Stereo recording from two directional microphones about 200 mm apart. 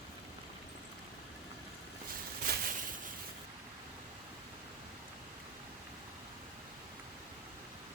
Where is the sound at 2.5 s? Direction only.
50° right (ahead or behind).